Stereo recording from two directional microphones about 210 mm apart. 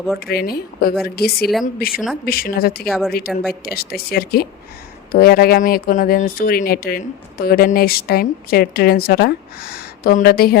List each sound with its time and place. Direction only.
0.2 s speech: 45° left (ahead or behind)
2.8 s a woman's voice: centre (ahead or behind)
3.1 s speech: 45° left (ahead or behind)